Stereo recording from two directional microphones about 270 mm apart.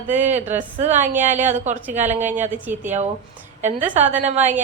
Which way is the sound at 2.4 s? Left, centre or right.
Centre.